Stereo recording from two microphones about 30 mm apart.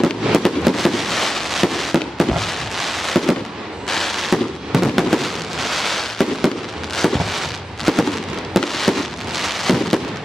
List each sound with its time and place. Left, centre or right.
0.3 s fireworks: centre
7.0 s a sound: centre
8.5 s fireworks: centre